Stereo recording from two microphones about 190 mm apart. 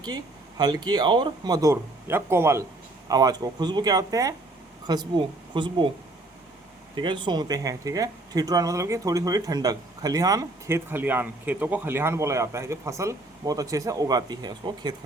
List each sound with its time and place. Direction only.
0.0 s speech: 20° right (ahead or behind)
6.9 s speech: 25° right (ahead or behind)